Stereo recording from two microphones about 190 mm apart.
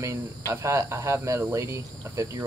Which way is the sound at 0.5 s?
15° right (ahead or behind).